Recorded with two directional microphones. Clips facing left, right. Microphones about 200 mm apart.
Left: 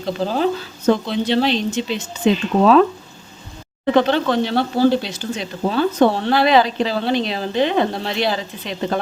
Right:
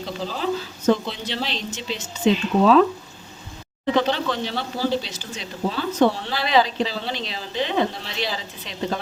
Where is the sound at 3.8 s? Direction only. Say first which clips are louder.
Left 5 dB; 55° left (ahead or behind).